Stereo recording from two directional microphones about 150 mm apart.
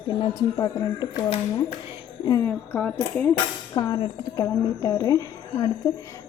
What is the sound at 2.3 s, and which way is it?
Speech, 15° left (ahead or behind).